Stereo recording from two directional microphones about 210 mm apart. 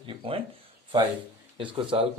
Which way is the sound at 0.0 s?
25° right (ahead or behind).